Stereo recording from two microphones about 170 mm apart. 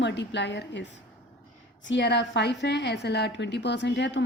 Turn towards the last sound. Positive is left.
turn(degrees=90)